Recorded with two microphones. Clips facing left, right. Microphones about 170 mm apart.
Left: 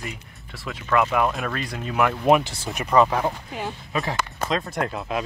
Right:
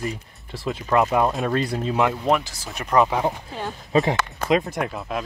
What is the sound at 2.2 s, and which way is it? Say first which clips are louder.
Speech: left 3 dB; 15° left (ahead or behind).